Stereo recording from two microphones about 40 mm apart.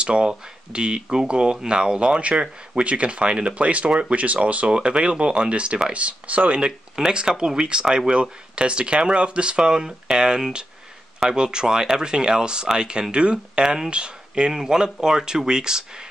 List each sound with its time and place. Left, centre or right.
0.0 s speech: right
7.1 s speech: right
8.1 s speech: right